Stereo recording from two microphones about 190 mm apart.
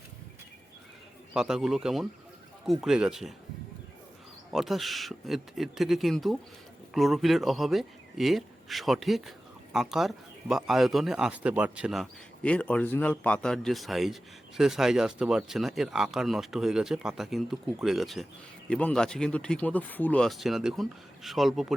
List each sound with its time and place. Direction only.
1.3 s speech: 5° right (ahead or behind)
4.5 s speech: centre (ahead or behind)